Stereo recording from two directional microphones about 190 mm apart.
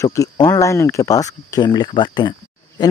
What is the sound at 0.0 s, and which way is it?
Speech, 15° left (ahead or behind).